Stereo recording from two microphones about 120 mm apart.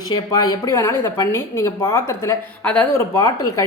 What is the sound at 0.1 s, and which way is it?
A woman's voice, 30° left (ahead or behind).